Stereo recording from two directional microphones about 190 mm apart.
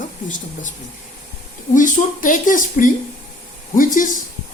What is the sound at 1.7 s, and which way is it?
Speech, 45° left (ahead or behind).